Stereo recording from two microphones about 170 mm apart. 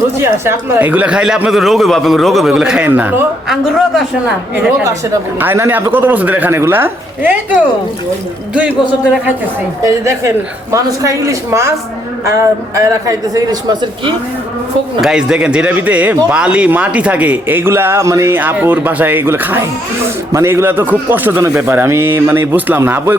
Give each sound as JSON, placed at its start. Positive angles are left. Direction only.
{"t": 0.2, "sound": "speech", "side_deg": -10}
{"t": 5.4, "sound": "a man's voice", "side_deg": -15}
{"t": 15.0, "sound": "a man's voice", "side_deg": -5}